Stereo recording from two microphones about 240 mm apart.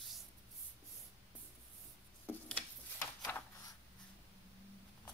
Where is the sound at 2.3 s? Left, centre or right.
Centre.